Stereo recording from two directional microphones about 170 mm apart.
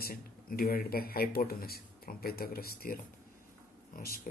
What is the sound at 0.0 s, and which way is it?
Speech, 60° left (ahead or behind).